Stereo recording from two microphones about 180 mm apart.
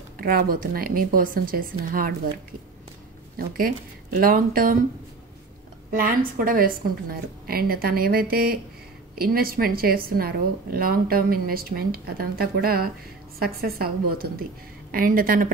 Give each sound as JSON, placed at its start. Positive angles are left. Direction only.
{"t": 0.2, "sound": "speech", "side_deg": -55}
{"t": 3.3, "sound": "speech", "side_deg": -50}
{"t": 5.9, "sound": "a woman's voice", "side_deg": -50}